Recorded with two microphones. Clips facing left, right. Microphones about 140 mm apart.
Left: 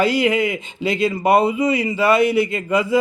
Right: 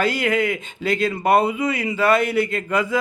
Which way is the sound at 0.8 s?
45° right (ahead or behind).